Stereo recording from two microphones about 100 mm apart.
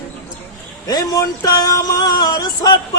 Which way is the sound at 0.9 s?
35° left (ahead or behind).